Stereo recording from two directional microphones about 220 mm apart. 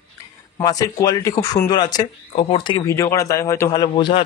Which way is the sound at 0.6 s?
15° left (ahead or behind).